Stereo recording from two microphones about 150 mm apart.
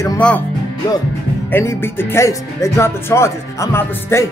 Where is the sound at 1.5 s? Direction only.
15° left (ahead or behind).